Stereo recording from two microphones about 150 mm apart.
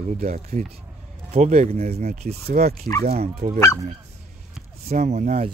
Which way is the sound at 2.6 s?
80° right.